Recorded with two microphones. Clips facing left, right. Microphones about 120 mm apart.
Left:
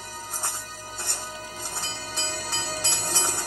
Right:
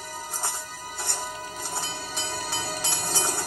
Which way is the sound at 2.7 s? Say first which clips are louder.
Even; 15° left (ahead or behind).